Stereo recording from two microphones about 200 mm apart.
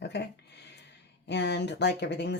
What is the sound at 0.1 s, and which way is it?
Speech, 60° left (ahead or behind).